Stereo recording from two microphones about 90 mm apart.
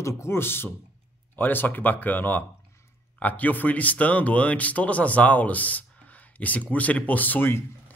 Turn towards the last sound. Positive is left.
turn(degrees=25)  # may be behind; listen again after turning